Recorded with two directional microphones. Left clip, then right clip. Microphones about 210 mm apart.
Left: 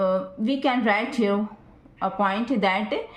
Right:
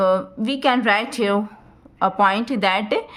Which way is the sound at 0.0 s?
50° right (ahead or behind).